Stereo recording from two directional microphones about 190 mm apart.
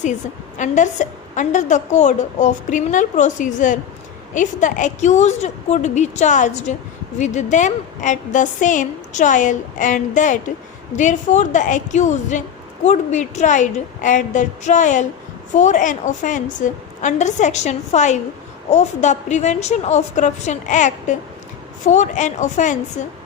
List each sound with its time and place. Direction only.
0.6 s a woman's voice: 40° left (ahead or behind)